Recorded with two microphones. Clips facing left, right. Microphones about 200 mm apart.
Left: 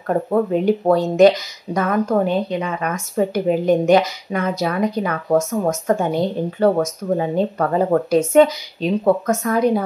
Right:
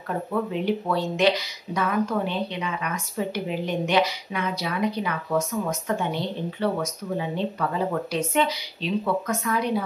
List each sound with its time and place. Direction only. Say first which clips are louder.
0.1 s speech: left 9 dB; 45° left (ahead or behind)